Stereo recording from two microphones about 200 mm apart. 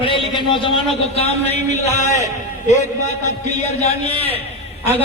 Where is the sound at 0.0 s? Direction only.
25° left (ahead or behind).